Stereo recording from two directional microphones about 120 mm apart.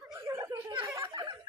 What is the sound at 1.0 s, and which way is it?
Snicker, 30° right (ahead or behind).